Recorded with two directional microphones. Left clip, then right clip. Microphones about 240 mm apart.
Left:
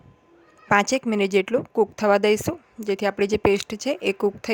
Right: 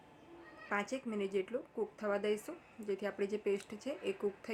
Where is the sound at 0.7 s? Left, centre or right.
Left.